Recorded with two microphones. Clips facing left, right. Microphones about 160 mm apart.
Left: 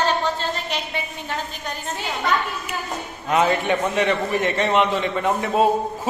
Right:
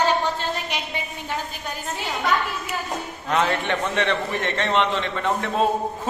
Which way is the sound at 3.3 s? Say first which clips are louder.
Left 3 dB; 10° left (ahead or behind).